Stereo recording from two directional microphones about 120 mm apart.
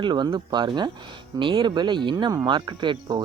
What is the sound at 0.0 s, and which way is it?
Speech, 40° right (ahead or behind).